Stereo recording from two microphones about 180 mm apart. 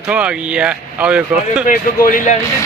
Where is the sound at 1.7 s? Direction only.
45° left (ahead or behind).